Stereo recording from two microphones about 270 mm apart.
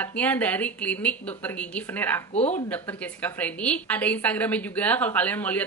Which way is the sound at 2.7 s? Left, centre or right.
Centre.